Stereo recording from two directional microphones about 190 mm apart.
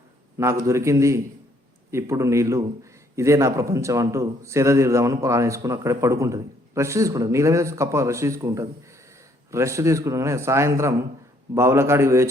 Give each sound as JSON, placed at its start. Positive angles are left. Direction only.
{"t": 0.3, "sound": "a man's voice", "side_deg": -15}